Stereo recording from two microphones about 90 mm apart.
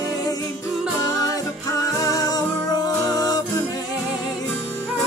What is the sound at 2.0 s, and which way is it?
Music, 45° left (ahead or behind).